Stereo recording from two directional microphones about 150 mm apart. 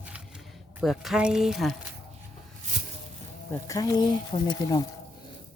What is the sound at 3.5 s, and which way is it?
Speech, 20° left (ahead or behind).